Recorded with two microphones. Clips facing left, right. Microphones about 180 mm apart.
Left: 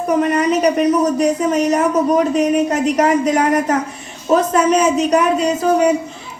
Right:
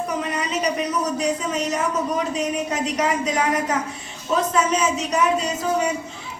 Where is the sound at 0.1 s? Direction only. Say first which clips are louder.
Left 10 dB; 65° left (ahead or behind).